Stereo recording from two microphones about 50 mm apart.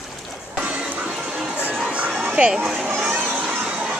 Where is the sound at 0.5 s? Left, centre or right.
Right.